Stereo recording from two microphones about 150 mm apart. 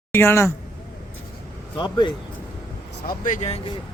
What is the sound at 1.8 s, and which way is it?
Speech, 30° left (ahead or behind).